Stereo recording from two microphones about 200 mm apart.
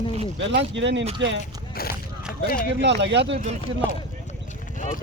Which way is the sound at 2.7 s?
60° right (ahead or behind).